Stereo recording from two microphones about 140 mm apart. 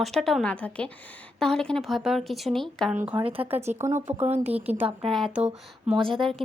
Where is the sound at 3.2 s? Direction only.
40° right (ahead or behind).